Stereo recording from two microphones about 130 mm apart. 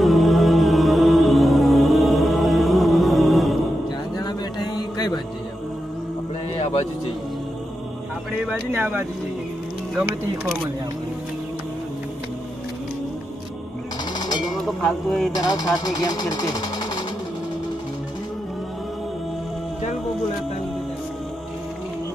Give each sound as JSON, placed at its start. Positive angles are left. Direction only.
{"t": 0.0, "sound": "music", "side_deg": 0}
{"t": 4.2, "sound": "music", "side_deg": 30}
{"t": 8.5, "sound": "speech", "side_deg": -15}
{"t": 14.1, "sound": "music", "side_deg": 30}
{"t": 14.6, "sound": "speech", "side_deg": 5}
{"t": 15.3, "sound": "speech", "side_deg": 30}